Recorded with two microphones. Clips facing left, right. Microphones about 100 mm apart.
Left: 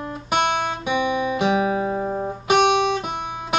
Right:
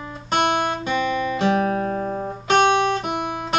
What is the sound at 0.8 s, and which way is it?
Guitar, 15° left (ahead or behind).